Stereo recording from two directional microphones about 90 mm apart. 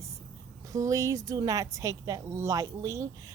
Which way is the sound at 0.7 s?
35° right (ahead or behind).